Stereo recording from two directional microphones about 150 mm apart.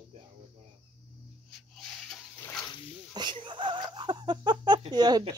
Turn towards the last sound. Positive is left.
turn(degrees=-25)  # may be behind; listen again after turning